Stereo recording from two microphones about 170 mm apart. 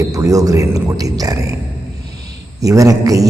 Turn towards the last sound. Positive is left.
turn(degrees=-20)  # may be behind; listen again after turning